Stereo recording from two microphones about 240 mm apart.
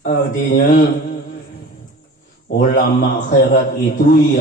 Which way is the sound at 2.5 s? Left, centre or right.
Left.